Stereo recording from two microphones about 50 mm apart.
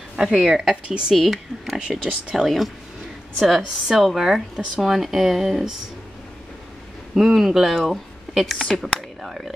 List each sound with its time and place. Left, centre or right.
0.1 s speech: centre
1.1 s speech: centre
1.8 s speech: centre
2.3 s speech: centre
7.2 s speech: centre